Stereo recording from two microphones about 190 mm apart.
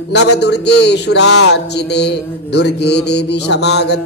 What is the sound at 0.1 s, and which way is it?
Speech, 65° left (ahead or behind).